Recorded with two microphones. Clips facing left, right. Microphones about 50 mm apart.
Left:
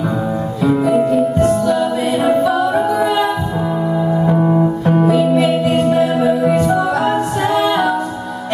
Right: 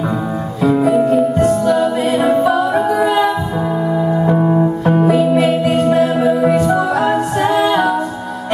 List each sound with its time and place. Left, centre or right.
1.6 s music: right
2.7 s music: centre
4.3 s keyboard: centre
5.4 s music: right